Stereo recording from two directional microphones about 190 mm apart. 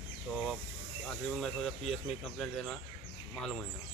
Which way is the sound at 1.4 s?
5° left (ahead or behind).